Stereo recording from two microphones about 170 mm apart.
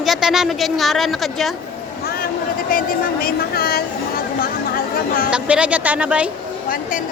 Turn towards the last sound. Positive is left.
turn(degrees=-5)  # may be behind; listen again after turning